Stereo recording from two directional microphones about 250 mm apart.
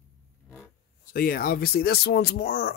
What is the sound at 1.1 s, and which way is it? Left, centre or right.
Speech, left.